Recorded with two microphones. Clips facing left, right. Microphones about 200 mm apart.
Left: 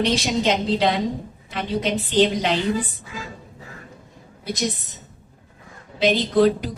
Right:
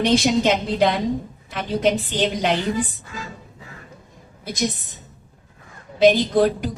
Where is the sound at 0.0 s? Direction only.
50° right (ahead or behind).